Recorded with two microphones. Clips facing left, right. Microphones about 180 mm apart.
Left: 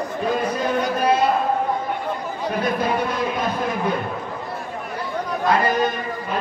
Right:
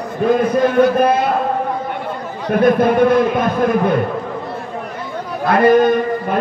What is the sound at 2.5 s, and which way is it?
A man's voice, 55° right (ahead or behind).